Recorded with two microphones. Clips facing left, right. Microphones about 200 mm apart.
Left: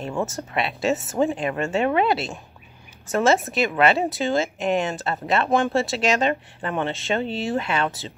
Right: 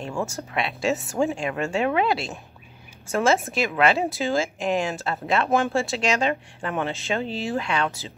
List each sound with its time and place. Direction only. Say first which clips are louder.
0.0 s a woman's voice: left 2 dB; centre (ahead or behind)